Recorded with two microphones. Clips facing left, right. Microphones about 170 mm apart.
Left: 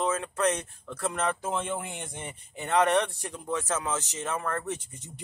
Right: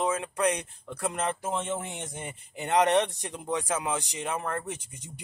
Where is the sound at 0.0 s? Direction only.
15° right (ahead or behind).